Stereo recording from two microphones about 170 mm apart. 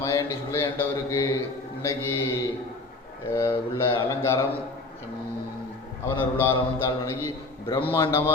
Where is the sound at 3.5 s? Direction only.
30° left (ahead or behind).